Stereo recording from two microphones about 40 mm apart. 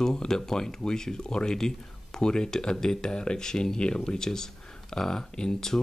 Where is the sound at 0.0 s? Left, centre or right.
Centre.